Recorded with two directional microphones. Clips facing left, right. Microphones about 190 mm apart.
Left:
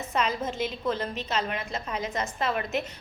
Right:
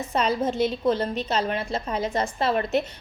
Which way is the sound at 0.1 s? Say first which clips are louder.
Right 5 dB; 35° right (ahead or behind).